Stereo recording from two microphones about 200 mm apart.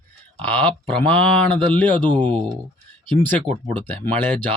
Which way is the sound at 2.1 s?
20° right (ahead or behind).